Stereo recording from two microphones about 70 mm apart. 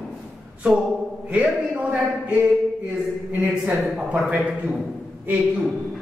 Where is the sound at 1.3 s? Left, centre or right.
Centre.